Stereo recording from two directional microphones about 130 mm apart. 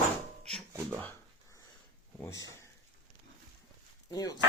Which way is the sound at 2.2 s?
25° left (ahead or behind).